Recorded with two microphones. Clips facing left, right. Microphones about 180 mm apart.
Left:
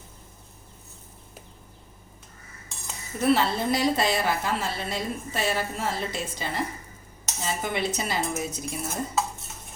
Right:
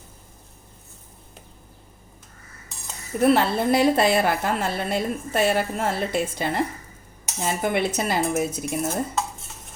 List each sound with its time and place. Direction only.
3.2 s a woman's voice: 55° right (ahead or behind)